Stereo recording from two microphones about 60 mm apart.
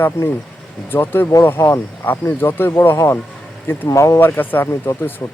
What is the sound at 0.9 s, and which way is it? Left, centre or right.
Speech, left.